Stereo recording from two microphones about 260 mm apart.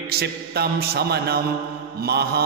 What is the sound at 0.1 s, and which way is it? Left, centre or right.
A man's voice, right.